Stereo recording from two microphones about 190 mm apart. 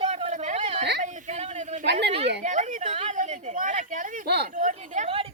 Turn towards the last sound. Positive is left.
turn(degrees=-30)  # may be behind; listen again after turning